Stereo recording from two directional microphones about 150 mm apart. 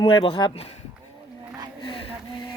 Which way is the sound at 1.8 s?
35° left (ahead or behind).